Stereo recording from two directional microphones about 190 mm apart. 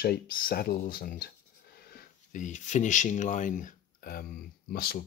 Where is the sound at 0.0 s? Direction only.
50° left (ahead or behind).